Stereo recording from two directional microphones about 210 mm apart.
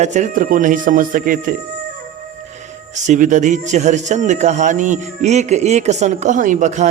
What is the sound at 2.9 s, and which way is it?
Speech, 35° right (ahead or behind).